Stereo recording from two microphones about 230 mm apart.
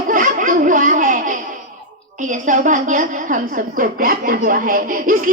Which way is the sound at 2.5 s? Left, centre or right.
Right.